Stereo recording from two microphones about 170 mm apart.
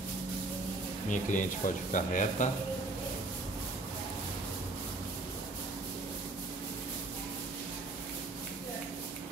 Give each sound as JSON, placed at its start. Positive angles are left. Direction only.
{"t": 1.1, "sound": "speech", "side_deg": 50}